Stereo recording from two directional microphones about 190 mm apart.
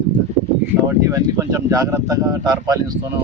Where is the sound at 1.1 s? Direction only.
15° right (ahead or behind).